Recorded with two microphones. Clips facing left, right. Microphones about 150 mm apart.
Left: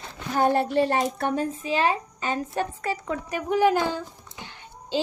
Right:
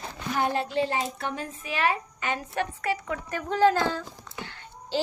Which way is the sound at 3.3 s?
15° left (ahead or behind).